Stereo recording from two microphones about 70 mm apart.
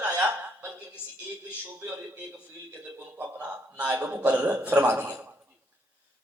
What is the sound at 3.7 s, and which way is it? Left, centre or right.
A man's voice, right.